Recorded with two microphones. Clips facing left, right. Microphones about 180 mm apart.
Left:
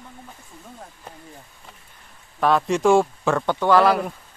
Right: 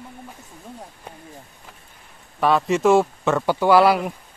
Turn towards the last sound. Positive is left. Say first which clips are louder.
# right 2 dB
turn(degrees=-10)  # may be behind; listen again after turning